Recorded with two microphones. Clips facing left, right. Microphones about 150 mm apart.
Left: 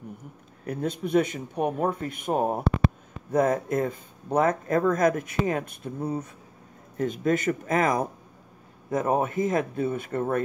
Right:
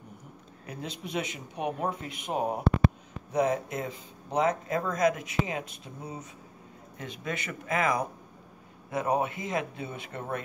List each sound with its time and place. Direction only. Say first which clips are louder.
0.7 s speech: left 10 dB; 50° left (ahead or behind)
7.0 s speech: left 12 dB; 45° left (ahead or behind)